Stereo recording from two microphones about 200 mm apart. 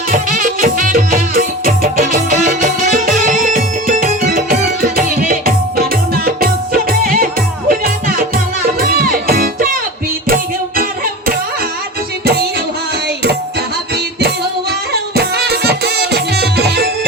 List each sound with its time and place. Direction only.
0.1 s music: 45° right (ahead or behind)
13.9 s music: 55° right (ahead or behind)